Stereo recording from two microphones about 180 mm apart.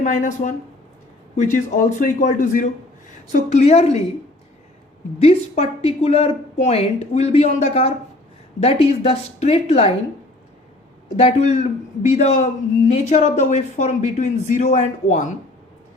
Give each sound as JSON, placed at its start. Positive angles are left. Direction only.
{"t": 0.0, "sound": "speech", "side_deg": 45}
{"t": 5.2, "sound": "speech", "side_deg": 35}
{"t": 11.2, "sound": "speech", "side_deg": 35}